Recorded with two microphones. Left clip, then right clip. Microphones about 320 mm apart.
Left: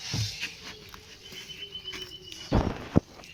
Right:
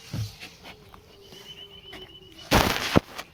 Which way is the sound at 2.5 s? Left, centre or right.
Right.